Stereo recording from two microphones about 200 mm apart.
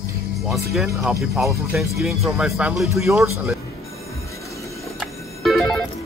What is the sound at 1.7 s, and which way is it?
Speech, centre (ahead or behind).